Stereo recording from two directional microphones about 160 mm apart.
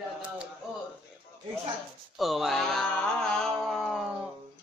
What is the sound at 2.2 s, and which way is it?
Mantra, centre (ahead or behind).